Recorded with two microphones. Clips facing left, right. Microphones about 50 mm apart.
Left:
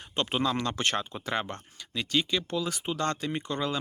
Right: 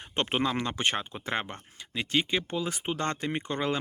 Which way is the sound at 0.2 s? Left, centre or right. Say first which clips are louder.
Even; right.